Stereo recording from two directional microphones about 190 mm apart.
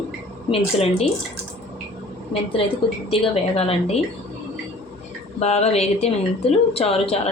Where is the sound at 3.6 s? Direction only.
30° left (ahead or behind).